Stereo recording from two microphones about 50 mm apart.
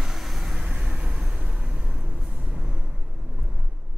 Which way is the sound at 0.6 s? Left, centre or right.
Centre.